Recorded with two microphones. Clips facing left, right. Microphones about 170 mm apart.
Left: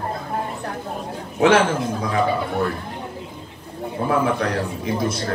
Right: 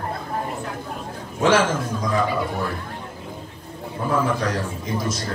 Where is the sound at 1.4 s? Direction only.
60° left (ahead or behind).